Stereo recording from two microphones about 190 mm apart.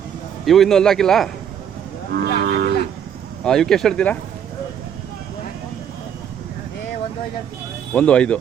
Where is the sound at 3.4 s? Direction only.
5° left (ahead or behind).